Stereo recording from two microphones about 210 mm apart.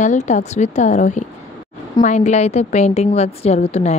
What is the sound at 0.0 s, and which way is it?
A woman's voice, 35° left (ahead or behind).